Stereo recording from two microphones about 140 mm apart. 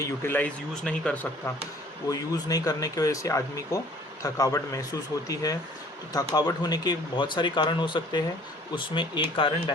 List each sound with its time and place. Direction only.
0.0 s speech: 15° left (ahead or behind)
2.0 s speech: 25° left (ahead or behind)